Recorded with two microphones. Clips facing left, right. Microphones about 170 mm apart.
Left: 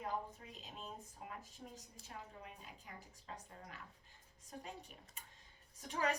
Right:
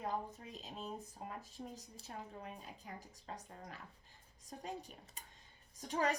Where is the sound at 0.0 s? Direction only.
35° right (ahead or behind).